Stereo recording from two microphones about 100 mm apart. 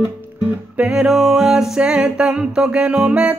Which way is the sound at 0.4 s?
10° right (ahead or behind).